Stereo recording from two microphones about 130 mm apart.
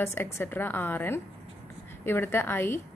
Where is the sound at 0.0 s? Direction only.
15° left (ahead or behind).